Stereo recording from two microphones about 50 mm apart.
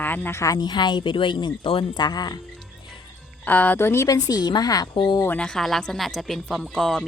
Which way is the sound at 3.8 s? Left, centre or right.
Left.